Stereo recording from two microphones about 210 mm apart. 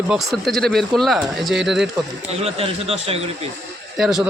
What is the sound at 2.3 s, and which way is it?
A man's voice, 30° right (ahead or behind).